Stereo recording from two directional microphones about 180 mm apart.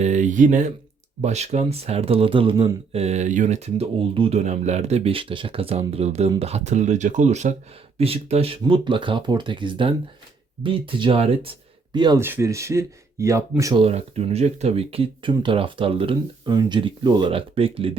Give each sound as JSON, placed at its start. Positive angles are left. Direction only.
{"t": 0.0, "sound": "speech", "side_deg": -40}
{"t": 13.8, "sound": "speech", "side_deg": -35}